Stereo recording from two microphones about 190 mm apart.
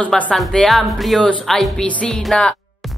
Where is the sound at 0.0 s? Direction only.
5° left (ahead or behind).